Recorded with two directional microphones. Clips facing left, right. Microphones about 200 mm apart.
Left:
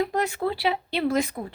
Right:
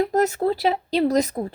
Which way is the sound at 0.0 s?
40° right (ahead or behind).